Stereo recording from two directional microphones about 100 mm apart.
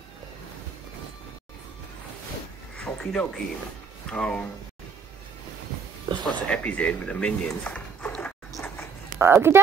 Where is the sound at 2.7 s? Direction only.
10° left (ahead or behind).